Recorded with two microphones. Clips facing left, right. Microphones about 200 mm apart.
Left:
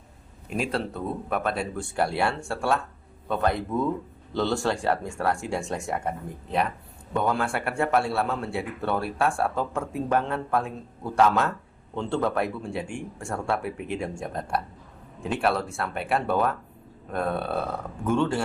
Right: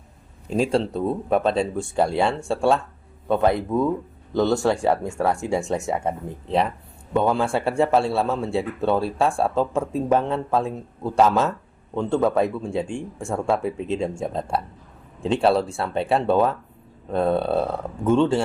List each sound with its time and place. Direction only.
0.5 s speech: 30° right (ahead or behind)